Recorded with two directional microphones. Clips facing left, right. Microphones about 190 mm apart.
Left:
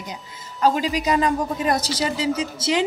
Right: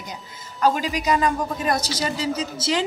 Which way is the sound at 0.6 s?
30° left (ahead or behind).